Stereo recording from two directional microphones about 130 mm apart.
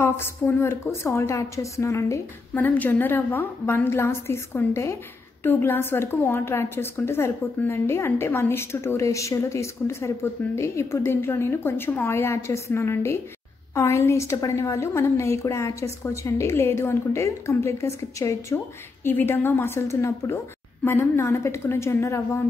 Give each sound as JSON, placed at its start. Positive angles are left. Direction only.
{"t": 0.0, "sound": "a woman's voice", "side_deg": 20}